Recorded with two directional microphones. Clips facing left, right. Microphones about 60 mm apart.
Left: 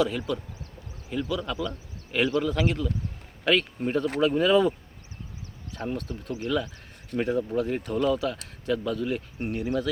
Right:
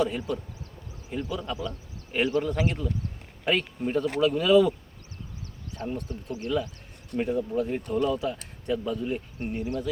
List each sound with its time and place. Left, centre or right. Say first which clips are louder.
0.0 s speech: left 1 dB; left
3.4 s speech: left 2 dB; left
5.7 s speech: left 1 dB; left